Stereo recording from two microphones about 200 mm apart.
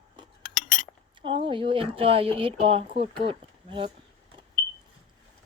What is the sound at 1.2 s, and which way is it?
Speech, 25° right (ahead or behind).